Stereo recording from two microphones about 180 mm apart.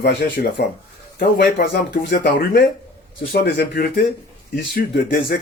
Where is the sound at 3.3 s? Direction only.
65° left (ahead or behind).